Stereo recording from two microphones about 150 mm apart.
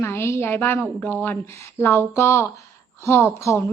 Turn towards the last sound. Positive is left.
turn(degrees=20)  # may be behind; listen again after turning